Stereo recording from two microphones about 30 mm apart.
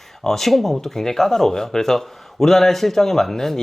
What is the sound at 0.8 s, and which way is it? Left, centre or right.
Speech, centre.